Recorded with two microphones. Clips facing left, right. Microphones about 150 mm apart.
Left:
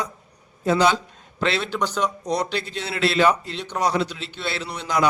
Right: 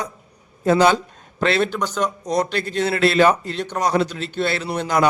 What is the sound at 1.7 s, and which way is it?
Speech, centre (ahead or behind).